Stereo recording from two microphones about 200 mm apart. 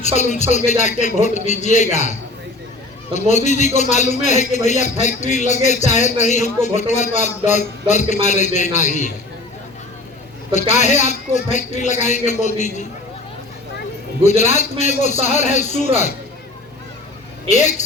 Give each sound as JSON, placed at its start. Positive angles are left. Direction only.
{"t": 0.0, "sound": "a man's voice", "side_deg": 35}
{"t": 10.5, "sound": "a man's voice", "side_deg": 35}
{"t": 14.3, "sound": "a man's voice", "side_deg": 35}
{"t": 17.5, "sound": "a man's voice", "side_deg": 35}